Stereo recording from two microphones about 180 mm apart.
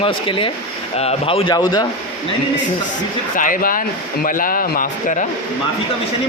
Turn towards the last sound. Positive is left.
turn(degrees=45)  # may be behind; listen again after turning